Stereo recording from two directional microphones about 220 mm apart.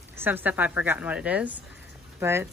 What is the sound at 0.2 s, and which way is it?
A woman's voice, 10° right (ahead or behind).